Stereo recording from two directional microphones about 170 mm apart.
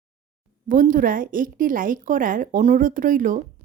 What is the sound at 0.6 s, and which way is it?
Speech, 50° right (ahead or behind).